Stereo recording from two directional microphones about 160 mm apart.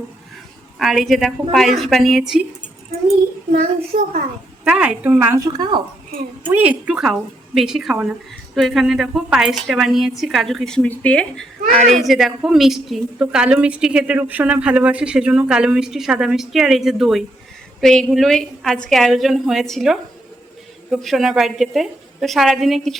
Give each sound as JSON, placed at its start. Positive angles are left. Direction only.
{"t": 0.8, "sound": "a woman's voice", "side_deg": 0}
{"t": 3.5, "sound": "a child's voice", "side_deg": -40}
{"t": 4.6, "sound": "a woman's voice", "side_deg": -5}
{"t": 5.4, "sound": "speech", "side_deg": -25}
{"t": 6.5, "sound": "a woman's voice", "side_deg": -10}